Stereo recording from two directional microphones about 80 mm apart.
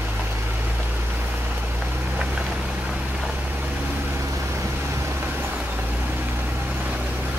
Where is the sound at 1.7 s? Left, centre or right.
Right.